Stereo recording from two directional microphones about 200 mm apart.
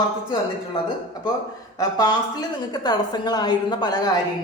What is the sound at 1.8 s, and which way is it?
Speech, 20° left (ahead or behind).